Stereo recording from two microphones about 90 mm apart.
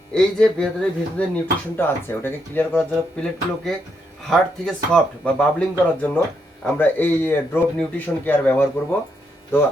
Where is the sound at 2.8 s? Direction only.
10° left (ahead or behind).